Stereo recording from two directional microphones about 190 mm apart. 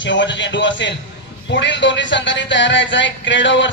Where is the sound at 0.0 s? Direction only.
70° left (ahead or behind).